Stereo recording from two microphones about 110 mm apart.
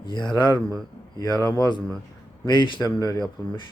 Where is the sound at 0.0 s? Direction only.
45° left (ahead or behind).